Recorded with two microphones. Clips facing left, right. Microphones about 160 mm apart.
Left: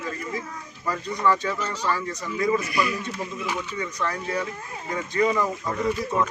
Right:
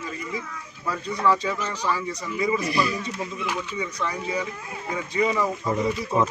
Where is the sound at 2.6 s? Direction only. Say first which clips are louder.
Right 1 dB; 30° right (ahead or behind).